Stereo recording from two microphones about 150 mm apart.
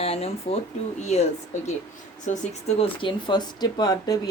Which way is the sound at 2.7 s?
35° left (ahead or behind).